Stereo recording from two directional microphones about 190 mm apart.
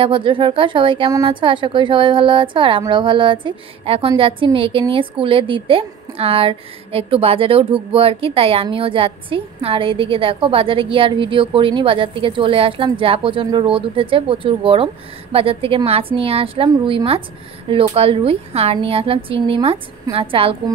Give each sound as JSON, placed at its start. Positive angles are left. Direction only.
{"t": 0.0, "sound": "a woman's voice", "side_deg": -25}